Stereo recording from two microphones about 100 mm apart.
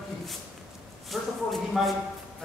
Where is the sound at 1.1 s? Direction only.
Centre (ahead or behind).